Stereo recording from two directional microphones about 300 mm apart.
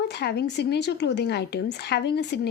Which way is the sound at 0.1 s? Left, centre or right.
Left.